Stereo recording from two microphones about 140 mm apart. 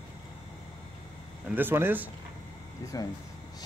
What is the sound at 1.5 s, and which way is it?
Speech, 15° right (ahead or behind).